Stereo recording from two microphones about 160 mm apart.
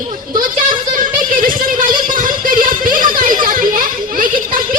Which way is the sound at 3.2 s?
60° right (ahead or behind).